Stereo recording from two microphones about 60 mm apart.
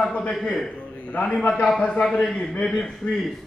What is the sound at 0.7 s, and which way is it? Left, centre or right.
A man's voice, left.